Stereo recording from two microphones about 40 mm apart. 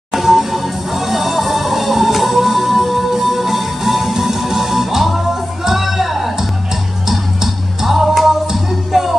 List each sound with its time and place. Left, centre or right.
0.1 s music: centre